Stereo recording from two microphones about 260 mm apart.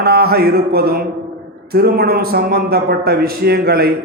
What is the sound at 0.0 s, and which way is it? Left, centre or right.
Mantra, right.